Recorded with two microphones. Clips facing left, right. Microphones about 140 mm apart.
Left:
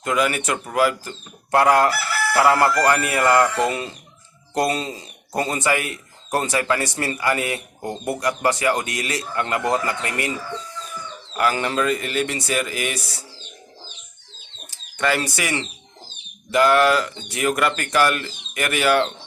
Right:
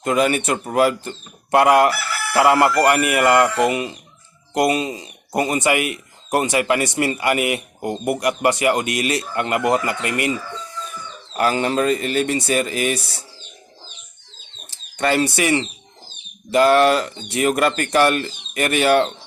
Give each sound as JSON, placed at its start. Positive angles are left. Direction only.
{"t": 0.0, "sound": "speech", "side_deg": -25}
{"t": 11.3, "sound": "speech", "side_deg": -25}
{"t": 14.7, "sound": "speech", "side_deg": -30}